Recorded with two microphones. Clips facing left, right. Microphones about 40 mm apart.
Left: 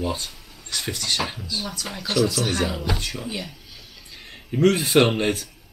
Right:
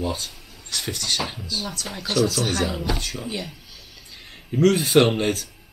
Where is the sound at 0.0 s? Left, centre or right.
Centre.